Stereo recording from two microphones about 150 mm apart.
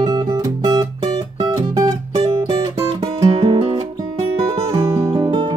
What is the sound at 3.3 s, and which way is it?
Music, 40° right (ahead or behind).